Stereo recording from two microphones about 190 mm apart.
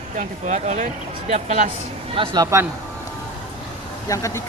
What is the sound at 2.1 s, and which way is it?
Speech, 25° right (ahead or behind).